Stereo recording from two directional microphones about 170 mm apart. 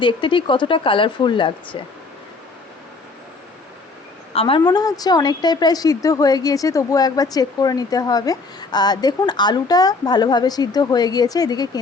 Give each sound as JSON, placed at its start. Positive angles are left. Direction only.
{"t": 0.0, "sound": "a woman's voice", "side_deg": 30}
{"t": 4.4, "sound": "a woman's voice", "side_deg": 30}